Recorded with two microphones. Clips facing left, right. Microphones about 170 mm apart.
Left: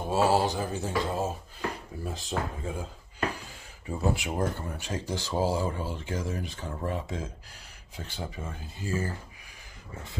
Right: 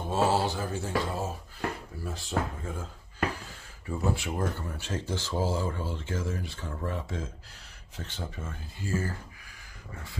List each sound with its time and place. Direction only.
0.1 s speech: 15° left (ahead or behind)